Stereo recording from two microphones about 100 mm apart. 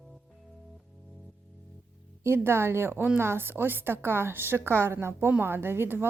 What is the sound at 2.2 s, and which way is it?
A woman's voice, 25° right (ahead or behind).